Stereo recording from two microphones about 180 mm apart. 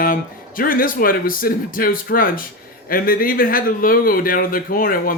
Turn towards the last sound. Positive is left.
turn(degrees=55)  # may be behind; listen again after turning